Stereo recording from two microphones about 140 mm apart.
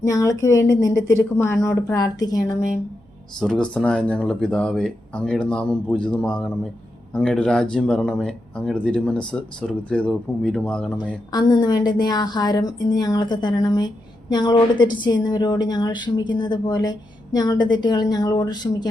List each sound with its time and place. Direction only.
0.0 s a woman's voice: 25° left (ahead or behind)
3.4 s speech: 5° left (ahead or behind)
11.3 s a woman's voice: 30° left (ahead or behind)